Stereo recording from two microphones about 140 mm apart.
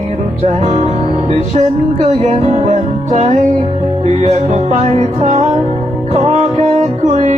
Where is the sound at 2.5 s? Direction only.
50° right (ahead or behind).